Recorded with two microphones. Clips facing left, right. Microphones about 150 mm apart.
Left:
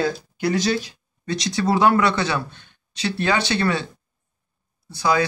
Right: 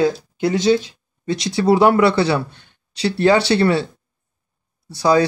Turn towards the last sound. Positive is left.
turn(degrees=-35)  # may be behind; listen again after turning